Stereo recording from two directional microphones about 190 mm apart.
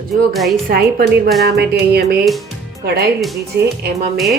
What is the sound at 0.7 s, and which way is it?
Speech, 50° right (ahead or behind).